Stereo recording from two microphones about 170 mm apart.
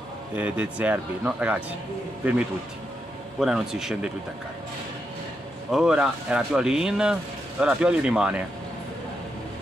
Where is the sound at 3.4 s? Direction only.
5° right (ahead or behind).